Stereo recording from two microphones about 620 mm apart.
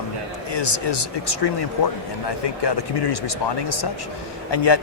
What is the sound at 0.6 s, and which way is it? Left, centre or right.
A man's voice, left.